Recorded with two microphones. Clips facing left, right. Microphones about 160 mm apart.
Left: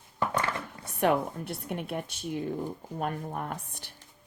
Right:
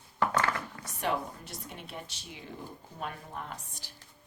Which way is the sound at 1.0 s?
55° left (ahead or behind).